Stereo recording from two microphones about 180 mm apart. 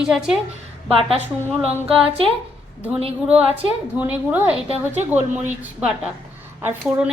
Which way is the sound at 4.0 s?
10° right (ahead or behind).